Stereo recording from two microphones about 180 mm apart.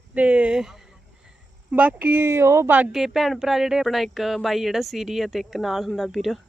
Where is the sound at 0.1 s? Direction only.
5° right (ahead or behind).